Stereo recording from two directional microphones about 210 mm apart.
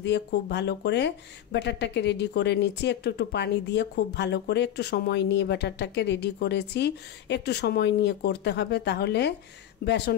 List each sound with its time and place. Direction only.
0.0 s speech: 55° left (ahead or behind)